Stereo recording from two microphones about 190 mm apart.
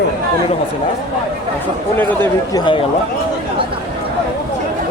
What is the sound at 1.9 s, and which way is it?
Speech, 10° left (ahead or behind).